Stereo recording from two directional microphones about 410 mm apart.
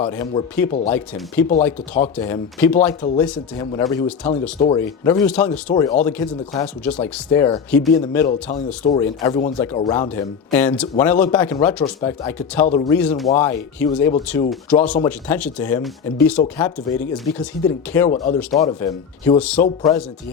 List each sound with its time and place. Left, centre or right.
0.0 s speech: centre
8.3 s speech: centre
12.6 s speech: centre
12.9 s speech: centre